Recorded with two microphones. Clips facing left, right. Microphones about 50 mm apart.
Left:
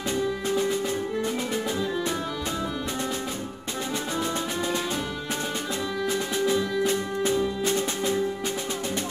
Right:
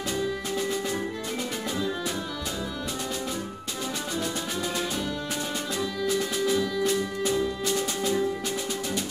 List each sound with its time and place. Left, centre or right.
0.1 s music: left
6.0 s music: left